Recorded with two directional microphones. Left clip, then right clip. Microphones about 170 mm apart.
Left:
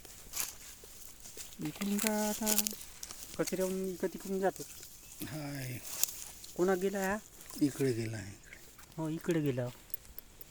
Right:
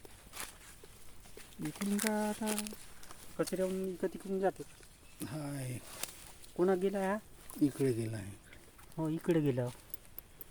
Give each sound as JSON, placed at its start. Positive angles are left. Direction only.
{"t": 0.3, "sound": "walk", "side_deg": 30}
{"t": 1.6, "sound": "speech", "side_deg": 15}
{"t": 2.2, "sound": "speech", "side_deg": 40}
{"t": 3.3, "sound": "speech", "side_deg": 30}
{"t": 4.6, "sound": "speech", "side_deg": 55}
{"t": 5.2, "sound": "speech", "side_deg": -10}
{"t": 6.0, "sound": "a sound", "side_deg": 30}
{"t": 6.6, "sound": "speech", "side_deg": -5}
{"t": 9.0, "sound": "speech", "side_deg": -20}